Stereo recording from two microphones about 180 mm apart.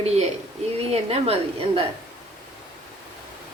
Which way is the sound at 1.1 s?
35° right (ahead or behind).